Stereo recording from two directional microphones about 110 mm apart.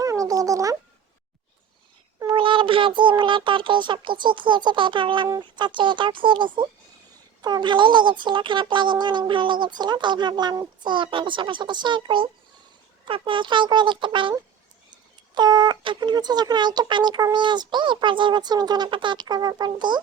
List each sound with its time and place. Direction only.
0.0 s music: 30° right (ahead or behind)
2.2 s a child's voice: 50° right (ahead or behind)
15.4 s speech: 40° right (ahead or behind)